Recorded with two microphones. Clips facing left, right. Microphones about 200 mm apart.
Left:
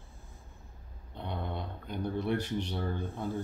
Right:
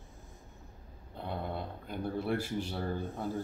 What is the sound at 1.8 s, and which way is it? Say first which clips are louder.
Speech: left 2 dB; 5° right (ahead or behind).